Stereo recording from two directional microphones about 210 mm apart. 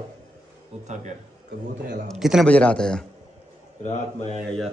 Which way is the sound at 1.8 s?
40° right (ahead or behind).